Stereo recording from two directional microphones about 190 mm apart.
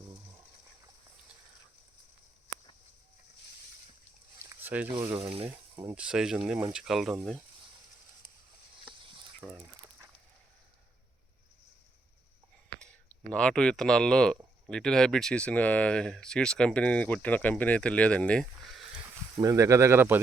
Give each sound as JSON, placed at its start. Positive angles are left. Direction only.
{"t": 4.4, "sound": "a sound", "side_deg": -10}
{"t": 4.9, "sound": "speech", "side_deg": -15}
{"t": 5.2, "sound": "speech", "side_deg": -30}
{"t": 5.8, "sound": "speech", "side_deg": -5}
{"t": 8.8, "sound": "a sound", "side_deg": -25}
{"t": 9.4, "sound": "chicken", "side_deg": -5}
{"t": 12.8, "sound": "speech", "side_deg": 5}
{"t": 19.4, "sound": "speech", "side_deg": -15}